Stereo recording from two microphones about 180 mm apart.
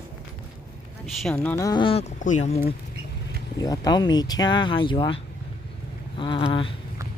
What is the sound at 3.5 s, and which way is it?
Speech, 20° left (ahead or behind).